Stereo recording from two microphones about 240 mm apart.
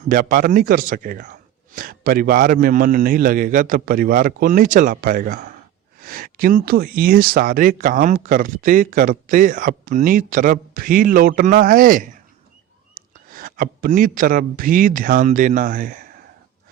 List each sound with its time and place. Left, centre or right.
0.1 s speech: right